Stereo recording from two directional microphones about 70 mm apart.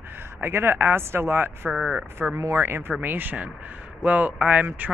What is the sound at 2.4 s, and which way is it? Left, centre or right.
Speech, right.